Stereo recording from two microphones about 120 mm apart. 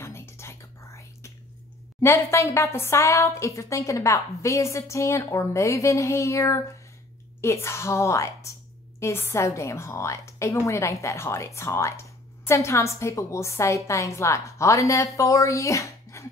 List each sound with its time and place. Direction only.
0.0 s whispering: 20° left (ahead or behind)
2.0 s a woman's voice: 25° left (ahead or behind)